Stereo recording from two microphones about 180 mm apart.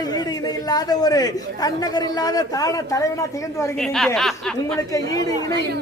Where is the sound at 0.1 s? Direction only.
20° left (ahead or behind).